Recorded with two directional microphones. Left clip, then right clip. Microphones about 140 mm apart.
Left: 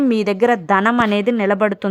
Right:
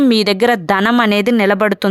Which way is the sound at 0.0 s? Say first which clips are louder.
Right 3 dB; 10° right (ahead or behind).